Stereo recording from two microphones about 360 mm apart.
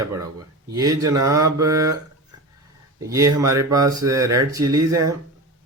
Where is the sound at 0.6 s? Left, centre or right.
Centre.